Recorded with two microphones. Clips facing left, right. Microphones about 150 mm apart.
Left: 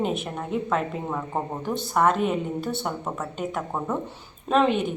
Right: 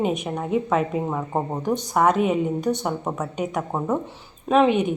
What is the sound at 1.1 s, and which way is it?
Speech, 15° right (ahead or behind).